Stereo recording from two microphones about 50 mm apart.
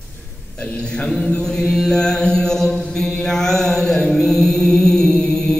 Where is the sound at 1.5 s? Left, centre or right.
Centre.